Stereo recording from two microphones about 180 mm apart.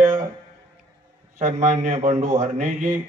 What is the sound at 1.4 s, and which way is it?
Speech, 45° right (ahead or behind).